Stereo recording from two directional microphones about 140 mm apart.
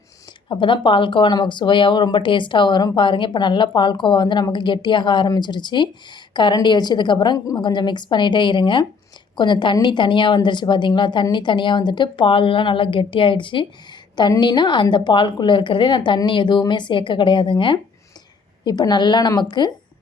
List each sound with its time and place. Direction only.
0.4 s speech: 35° left (ahead or behind)